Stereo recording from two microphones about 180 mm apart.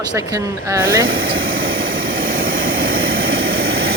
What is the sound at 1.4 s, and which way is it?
Vehicle, 55° right (ahead or behind).